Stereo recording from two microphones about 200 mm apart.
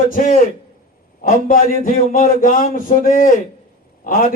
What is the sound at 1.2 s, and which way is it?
A man's voice, 45° left (ahead or behind).